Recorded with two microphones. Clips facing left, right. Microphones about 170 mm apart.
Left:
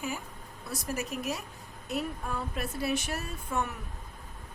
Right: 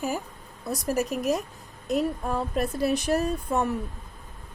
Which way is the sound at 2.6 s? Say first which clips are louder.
Right 6 dB; 40° right (ahead or behind).